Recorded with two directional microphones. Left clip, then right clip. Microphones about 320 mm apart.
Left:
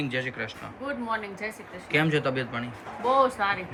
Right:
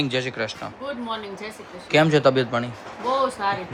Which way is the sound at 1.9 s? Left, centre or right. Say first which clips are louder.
Right 8 dB; centre.